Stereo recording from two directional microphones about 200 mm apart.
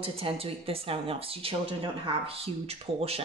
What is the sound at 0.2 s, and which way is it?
Speech, 30° right (ahead or behind).